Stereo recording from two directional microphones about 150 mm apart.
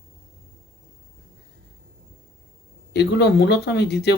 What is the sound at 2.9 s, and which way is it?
Speech, 90° left.